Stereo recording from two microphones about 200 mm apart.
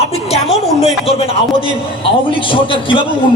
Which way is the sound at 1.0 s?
30° left (ahead or behind).